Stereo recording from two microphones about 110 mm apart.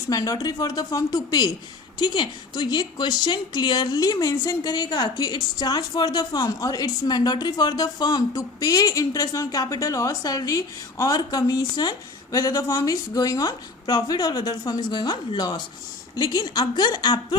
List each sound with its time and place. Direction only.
0.1 s speech: 30° left (ahead or behind)